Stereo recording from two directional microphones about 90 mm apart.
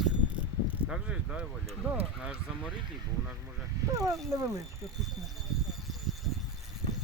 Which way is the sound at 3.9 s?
40° right (ahead or behind).